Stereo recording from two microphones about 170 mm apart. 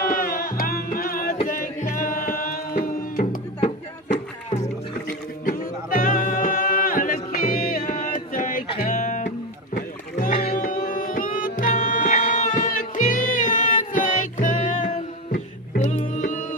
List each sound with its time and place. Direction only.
0.1 s music: 60° left (ahead or behind)
5.0 s music: 55° left (ahead or behind)